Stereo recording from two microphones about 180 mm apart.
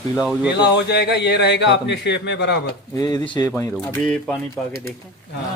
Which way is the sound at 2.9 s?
20° left (ahead or behind).